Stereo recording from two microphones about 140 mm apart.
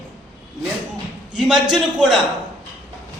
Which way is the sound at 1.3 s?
5° right (ahead or behind).